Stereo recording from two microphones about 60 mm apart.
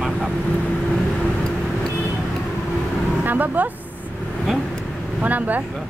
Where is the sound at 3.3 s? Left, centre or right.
Right.